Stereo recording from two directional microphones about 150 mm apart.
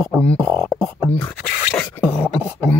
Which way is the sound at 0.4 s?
Centre (ahead or behind).